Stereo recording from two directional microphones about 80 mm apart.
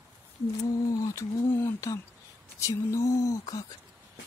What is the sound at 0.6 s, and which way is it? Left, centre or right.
Mantra, left.